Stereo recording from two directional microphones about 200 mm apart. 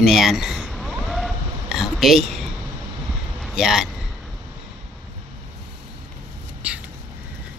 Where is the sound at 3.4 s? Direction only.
Centre (ahead or behind).